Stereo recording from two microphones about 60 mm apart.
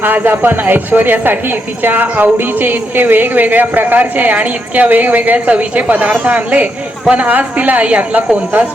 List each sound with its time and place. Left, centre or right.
0.0 s a woman's voice: right